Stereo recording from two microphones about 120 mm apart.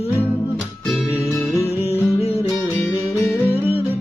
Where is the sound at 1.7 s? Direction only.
55° left (ahead or behind).